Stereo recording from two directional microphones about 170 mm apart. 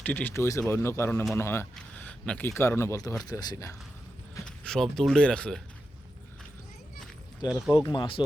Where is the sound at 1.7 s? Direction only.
10° left (ahead or behind).